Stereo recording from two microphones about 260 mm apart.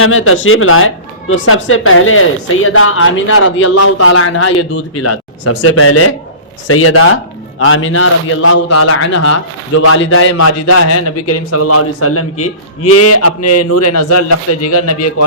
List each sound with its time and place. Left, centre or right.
0.0 s a man's voice: left
9.8 s speech: left
10.3 s a man's voice: left